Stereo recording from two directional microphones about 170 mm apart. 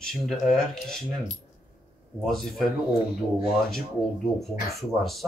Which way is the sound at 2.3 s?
Centre (ahead or behind).